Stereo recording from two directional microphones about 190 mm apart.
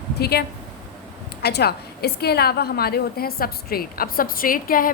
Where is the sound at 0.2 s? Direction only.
55° left (ahead or behind).